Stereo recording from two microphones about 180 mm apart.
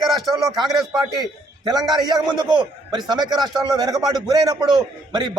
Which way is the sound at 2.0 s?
20° right (ahead or behind).